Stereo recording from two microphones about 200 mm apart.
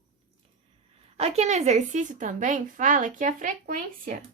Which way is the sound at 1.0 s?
30° right (ahead or behind).